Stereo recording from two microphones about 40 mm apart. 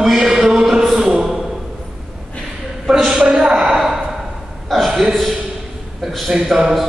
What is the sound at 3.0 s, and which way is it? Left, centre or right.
Speech, centre.